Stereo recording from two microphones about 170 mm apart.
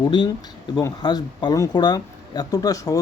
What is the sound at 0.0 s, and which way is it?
Speech, 25° left (ahead or behind).